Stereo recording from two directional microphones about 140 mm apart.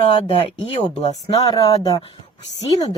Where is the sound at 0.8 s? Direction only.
25° left (ahead or behind).